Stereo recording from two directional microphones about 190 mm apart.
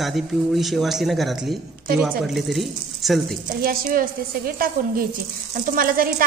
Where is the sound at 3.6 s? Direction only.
50° right (ahead or behind).